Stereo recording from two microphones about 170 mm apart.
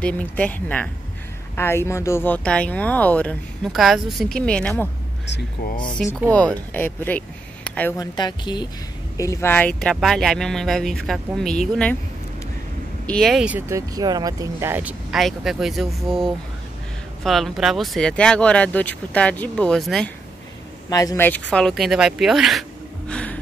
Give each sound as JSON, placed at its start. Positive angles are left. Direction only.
{"t": 0.0, "sound": "speech", "side_deg": 10}
{"t": 5.2, "sound": "speech", "side_deg": 90}
{"t": 6.3, "sound": "speech", "side_deg": 10}
{"t": 8.0, "sound": "speech", "side_deg": 25}
{"t": 13.0, "sound": "speech", "side_deg": 5}
{"t": 20.9, "sound": "speech", "side_deg": 20}
{"t": 21.3, "sound": "speech", "side_deg": 5}